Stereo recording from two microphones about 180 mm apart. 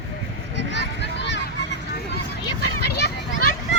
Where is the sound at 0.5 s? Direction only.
75° left (ahead or behind).